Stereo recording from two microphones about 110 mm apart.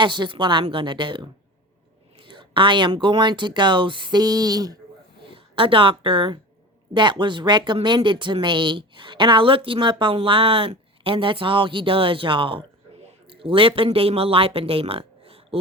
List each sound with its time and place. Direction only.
0.0 s speech: 45° right (ahead or behind)
5.3 s speech: 50° right (ahead or behind)